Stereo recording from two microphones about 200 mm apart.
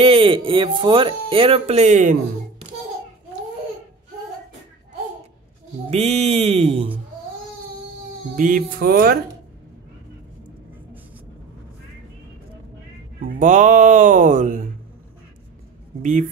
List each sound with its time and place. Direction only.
0.0 s speech: 25° right (ahead or behind)
5.9 s speech: 30° right (ahead or behind)
8.4 s speech: 45° right (ahead or behind)
13.2 s speech: 40° right (ahead or behind)
16.0 s speech: 40° right (ahead or behind)